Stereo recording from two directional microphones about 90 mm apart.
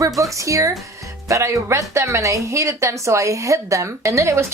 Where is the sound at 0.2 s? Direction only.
35° right (ahead or behind).